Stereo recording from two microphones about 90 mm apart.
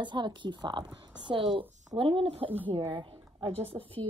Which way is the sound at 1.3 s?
85° right.